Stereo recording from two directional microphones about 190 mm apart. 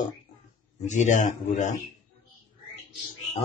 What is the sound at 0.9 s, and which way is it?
Speech, 40° left (ahead or behind).